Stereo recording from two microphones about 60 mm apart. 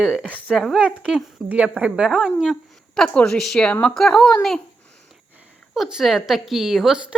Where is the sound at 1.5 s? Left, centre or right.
Right.